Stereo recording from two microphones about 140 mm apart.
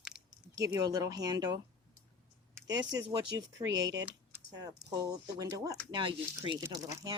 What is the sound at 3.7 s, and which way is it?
Speech, 25° right (ahead or behind).